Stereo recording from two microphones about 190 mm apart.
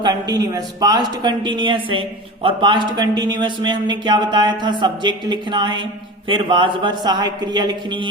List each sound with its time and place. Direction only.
0.0 s a woman's voice: 20° right (ahead or behind)